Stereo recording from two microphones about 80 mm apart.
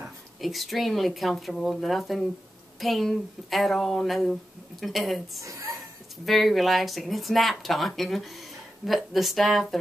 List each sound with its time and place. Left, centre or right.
0.4 s speech: centre
5.4 s a woman's voice: right
6.2 s speech: centre